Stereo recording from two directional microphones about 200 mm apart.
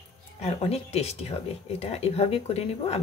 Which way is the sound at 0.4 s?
30° left (ahead or behind).